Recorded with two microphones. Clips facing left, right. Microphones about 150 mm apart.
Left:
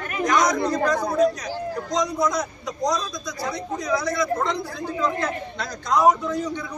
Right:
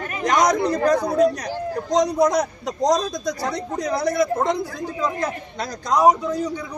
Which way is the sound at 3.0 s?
40° right (ahead or behind).